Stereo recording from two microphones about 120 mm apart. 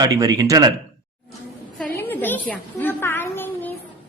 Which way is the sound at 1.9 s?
15° left (ahead or behind).